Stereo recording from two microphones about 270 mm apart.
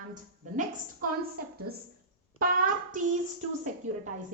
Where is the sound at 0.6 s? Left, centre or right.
Right.